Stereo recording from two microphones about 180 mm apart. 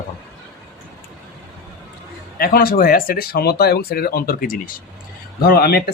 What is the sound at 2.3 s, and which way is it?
Speech, 55° left (ahead or behind).